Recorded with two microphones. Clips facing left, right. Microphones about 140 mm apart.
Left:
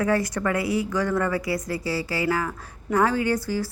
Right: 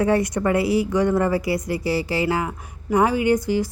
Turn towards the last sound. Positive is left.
turn(degrees=-20)  # may be behind; listen again after turning